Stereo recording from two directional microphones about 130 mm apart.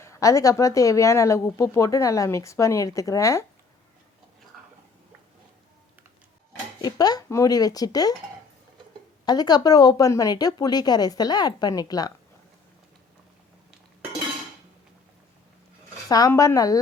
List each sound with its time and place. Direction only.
0.0 s speech: 25° left (ahead or behind)
4.5 s a sound: centre (ahead or behind)
6.8 s speech: 30° left (ahead or behind)
9.2 s speech: 30° left (ahead or behind)
16.0 s speech: 30° left (ahead or behind)